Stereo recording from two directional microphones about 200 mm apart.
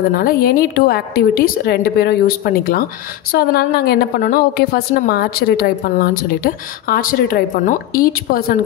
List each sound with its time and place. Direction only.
0.1 s a woman's voice: 45° left (ahead or behind)